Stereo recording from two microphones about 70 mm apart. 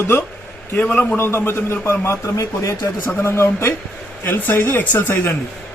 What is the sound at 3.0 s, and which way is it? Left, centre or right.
A man's voice, left.